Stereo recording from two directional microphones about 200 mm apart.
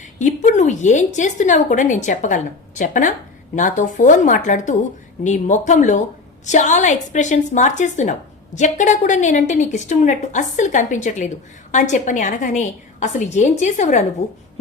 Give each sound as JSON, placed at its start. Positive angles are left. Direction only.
{"t": 0.2, "sound": "a woman's voice", "side_deg": 35}